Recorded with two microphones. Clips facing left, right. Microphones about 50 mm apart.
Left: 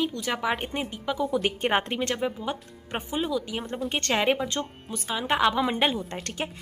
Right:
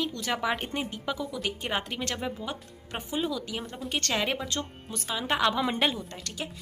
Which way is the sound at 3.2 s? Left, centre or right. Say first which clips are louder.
Left 3 dB; centre.